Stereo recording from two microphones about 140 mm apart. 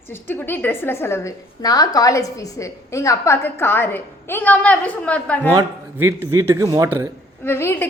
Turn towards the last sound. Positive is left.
turn(degrees=15)  # may be behind; listen again after turning